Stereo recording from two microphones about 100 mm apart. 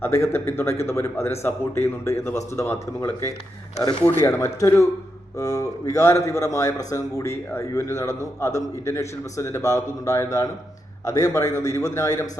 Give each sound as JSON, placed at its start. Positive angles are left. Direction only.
{"t": 0.0, "sound": "a man's voice", "side_deg": 25}